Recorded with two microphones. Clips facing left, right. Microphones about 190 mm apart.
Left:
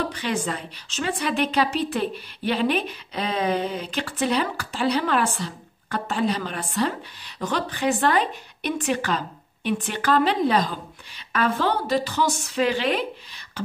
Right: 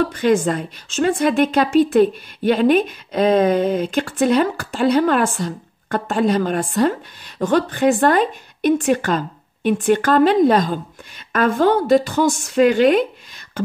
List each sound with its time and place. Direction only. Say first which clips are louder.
0.1 s a woman's voice: right 10 dB; 50° right (ahead or behind)